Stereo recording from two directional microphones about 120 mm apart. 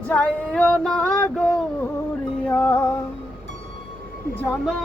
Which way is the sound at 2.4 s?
15° left (ahead or behind).